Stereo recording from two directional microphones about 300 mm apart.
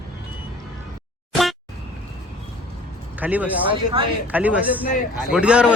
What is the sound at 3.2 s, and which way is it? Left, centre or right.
A man's voice, centre.